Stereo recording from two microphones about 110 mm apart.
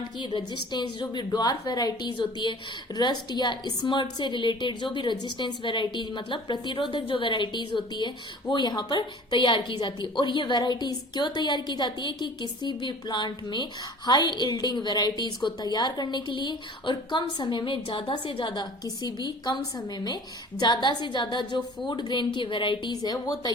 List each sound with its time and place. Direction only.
0.3 s a woman's voice: 40° left (ahead or behind)